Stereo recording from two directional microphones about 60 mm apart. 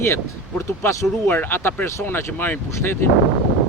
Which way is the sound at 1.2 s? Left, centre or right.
Left.